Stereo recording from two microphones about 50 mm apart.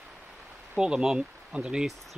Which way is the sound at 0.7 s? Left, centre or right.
Centre.